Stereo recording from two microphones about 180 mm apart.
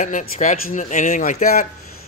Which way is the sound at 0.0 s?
45° left (ahead or behind).